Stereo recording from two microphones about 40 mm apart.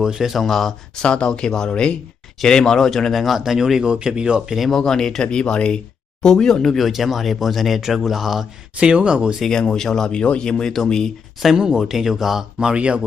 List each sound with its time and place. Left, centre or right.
0.0 s speech: centre
0.4 s speech: centre
1.0 s speech: left; by 3.8 s centre
3.8 s speech: right
4.7 s speech: centre
6.7 s speech: centre
7.8 s speech: centre
8.7 s speech: right
9.5 s speech: centre
11.5 s speech: centre
12.5 s speech: right